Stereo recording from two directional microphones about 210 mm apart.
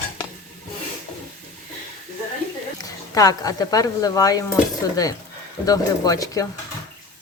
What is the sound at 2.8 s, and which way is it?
Speech, 15° left (ahead or behind).